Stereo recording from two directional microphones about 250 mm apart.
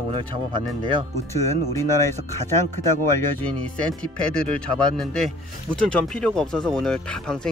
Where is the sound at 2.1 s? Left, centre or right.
Right.